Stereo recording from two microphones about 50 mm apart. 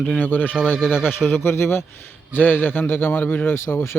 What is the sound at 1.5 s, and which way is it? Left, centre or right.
Speech, left.